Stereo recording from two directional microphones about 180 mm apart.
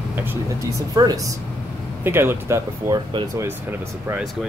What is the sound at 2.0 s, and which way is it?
Speech, 10° right (ahead or behind).